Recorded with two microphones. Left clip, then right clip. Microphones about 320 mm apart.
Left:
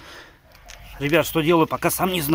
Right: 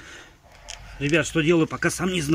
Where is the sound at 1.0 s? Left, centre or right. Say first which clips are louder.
Left 2 dB; centre.